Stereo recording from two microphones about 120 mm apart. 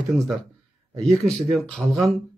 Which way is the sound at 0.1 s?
Centre (ahead or behind).